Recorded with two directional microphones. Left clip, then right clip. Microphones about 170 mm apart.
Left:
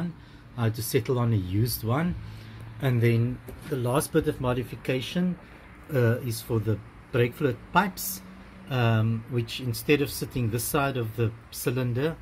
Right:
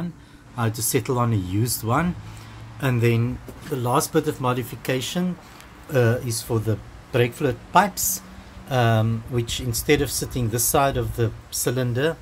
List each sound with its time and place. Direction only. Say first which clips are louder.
0.6 s speech: right 4 dB; 5° right (ahead or behind)